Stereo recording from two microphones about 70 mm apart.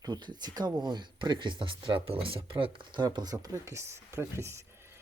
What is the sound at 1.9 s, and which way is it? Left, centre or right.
Speech, right.